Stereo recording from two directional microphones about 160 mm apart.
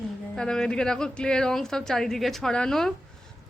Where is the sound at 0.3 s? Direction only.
5° left (ahead or behind).